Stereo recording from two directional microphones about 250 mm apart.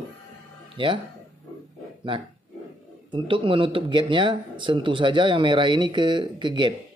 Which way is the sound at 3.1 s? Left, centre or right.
Right.